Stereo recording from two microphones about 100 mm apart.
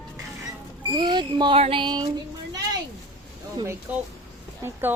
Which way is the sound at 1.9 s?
45° right (ahead or behind).